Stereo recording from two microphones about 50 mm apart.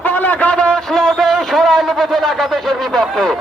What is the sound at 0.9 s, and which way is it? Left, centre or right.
A man's voice, centre.